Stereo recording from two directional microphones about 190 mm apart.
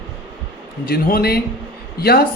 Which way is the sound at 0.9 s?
50° left (ahead or behind).